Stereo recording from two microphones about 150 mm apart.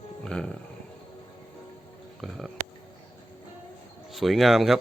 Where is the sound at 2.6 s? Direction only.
55° right (ahead or behind).